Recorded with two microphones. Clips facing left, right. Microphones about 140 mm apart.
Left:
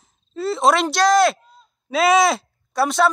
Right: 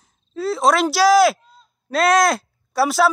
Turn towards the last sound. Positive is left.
turn(degrees=-5)  # may be behind; listen again after turning